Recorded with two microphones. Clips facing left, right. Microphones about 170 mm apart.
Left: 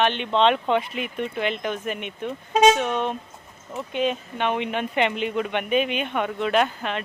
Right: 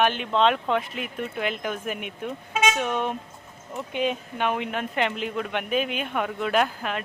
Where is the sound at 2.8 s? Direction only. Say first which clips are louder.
Left 1 dB; 10° right (ahead or behind).